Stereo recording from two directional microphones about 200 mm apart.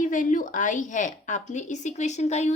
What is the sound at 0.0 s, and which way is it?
A woman's voice, 40° left (ahead or behind).